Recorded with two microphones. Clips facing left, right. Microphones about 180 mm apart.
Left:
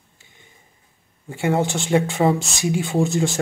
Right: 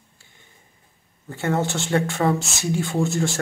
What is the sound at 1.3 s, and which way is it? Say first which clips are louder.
Speech: left 3 dB; 15° left (ahead or behind).